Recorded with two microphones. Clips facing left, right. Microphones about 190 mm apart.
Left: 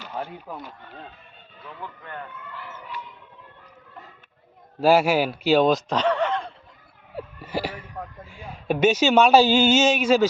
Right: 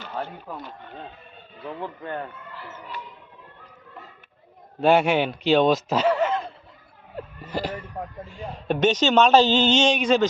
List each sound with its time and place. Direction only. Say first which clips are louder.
0.0 s speech: right 1 dB; 10° left (ahead or behind)
1.6 s speech: right 7 dB; 35° right (ahead or behind)
4.8 s speech: left 1 dB; 5° left (ahead or behind)
7.2 s hiccup: left 1 dB; 10° left (ahead or behind)
8.3 s speech: left 1 dB; 10° left (ahead or behind)